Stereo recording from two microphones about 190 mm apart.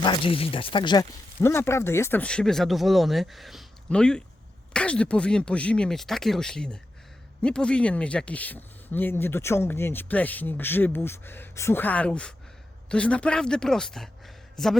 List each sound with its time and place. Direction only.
0.0 s a man's voice: 25° left (ahead or behind); by 14.8 s centre (ahead or behind)